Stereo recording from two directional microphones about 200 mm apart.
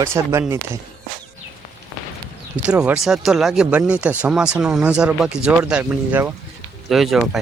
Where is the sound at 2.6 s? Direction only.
5° right (ahead or behind).